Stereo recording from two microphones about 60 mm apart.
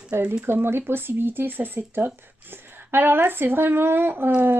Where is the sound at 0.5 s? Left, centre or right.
Right.